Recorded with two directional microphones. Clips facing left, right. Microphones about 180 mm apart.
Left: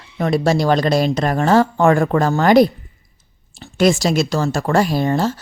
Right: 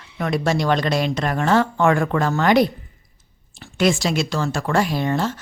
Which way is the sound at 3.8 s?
40° left (ahead or behind).